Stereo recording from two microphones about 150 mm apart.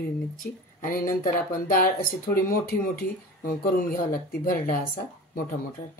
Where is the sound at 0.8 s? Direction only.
70° left (ahead or behind).